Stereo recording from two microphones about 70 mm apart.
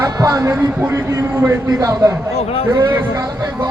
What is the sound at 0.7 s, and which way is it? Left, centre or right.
Speech, right.